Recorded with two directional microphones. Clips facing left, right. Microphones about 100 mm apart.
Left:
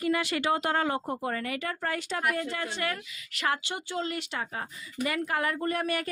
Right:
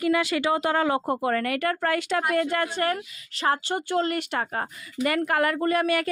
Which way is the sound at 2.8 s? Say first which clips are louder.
Right 6 dB; 40° right (ahead or behind).